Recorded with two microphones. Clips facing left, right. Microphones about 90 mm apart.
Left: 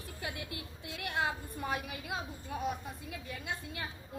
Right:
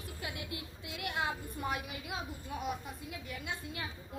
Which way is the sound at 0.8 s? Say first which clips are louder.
Left 2 dB; 35° left (ahead or behind).